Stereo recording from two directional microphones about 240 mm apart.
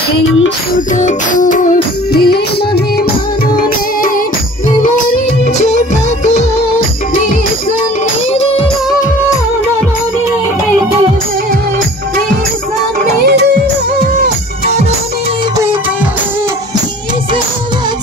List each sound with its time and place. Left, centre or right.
0.7 s music: left
5.4 s music: left
13.0 s music: right